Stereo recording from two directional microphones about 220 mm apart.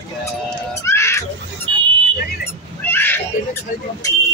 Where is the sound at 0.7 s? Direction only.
15° left (ahead or behind).